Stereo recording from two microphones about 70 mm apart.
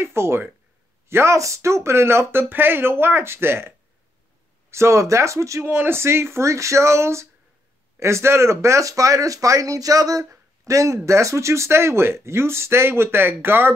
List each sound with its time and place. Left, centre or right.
0.0 s speech: right